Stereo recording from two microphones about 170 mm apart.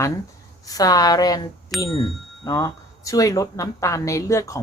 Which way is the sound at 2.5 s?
20° left (ahead or behind).